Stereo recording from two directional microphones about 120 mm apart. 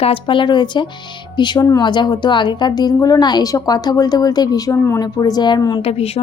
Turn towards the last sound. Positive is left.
turn(degrees=55)  # may be behind; listen again after turning